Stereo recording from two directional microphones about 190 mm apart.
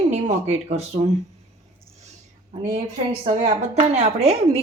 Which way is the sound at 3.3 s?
35° right (ahead or behind).